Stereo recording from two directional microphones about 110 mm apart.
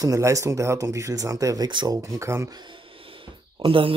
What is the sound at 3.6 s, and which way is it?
Speech, 50° right (ahead or behind).